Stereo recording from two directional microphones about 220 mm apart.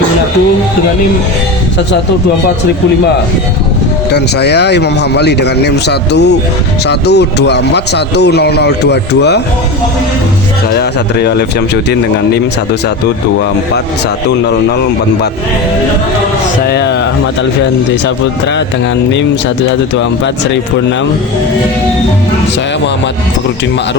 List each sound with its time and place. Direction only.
4.1 s speech: 50° left (ahead or behind)
10.8 s speech: 50° left (ahead or behind)
16.6 s speech: 50° left (ahead or behind)